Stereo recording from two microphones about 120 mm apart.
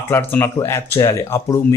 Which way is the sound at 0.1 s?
20° left (ahead or behind).